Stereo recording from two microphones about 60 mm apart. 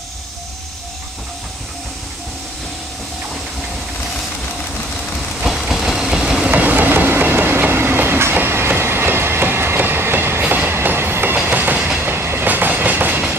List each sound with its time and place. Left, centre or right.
5.4 s vehicle: centre
6.5 s train: right
10.4 s train: right